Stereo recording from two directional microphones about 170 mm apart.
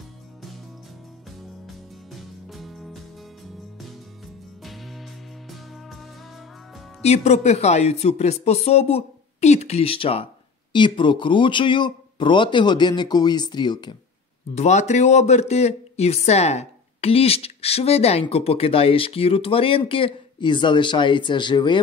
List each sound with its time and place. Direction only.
2.1 s music: centre (ahead or behind)
4.6 s music: centre (ahead or behind)
7.0 s speech: 40° left (ahead or behind); by 13.9 s 25° left (ahead or behind)
14.5 s speech: 40° left (ahead or behind)